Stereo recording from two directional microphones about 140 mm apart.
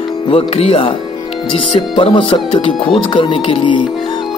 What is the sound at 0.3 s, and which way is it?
Speech, 45° left (ahead or behind).